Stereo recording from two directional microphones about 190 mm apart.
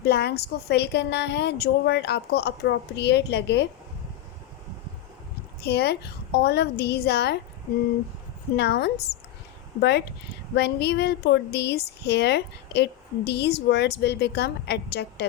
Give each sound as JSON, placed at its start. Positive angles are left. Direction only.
{"t": 0.0, "sound": "a woman's voice", "side_deg": 60}
{"t": 5.6, "sound": "a woman's voice", "side_deg": 60}
{"t": 8.5, "sound": "a woman's voice", "side_deg": 60}
{"t": 10.5, "sound": "a woman's voice", "side_deg": 60}